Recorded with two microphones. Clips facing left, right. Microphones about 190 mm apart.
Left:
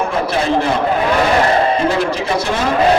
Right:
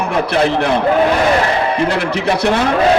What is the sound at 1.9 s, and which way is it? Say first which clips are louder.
Speech: even; 65° right (ahead or behind).